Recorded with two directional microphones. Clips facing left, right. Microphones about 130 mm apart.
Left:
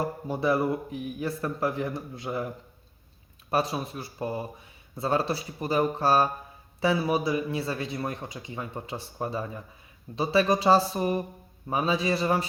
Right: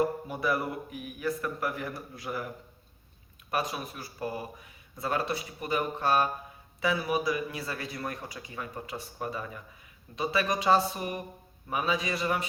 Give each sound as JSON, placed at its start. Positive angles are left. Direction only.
{"t": 0.3, "sound": "speech", "side_deg": 25}
{"t": 3.5, "sound": "speech", "side_deg": 30}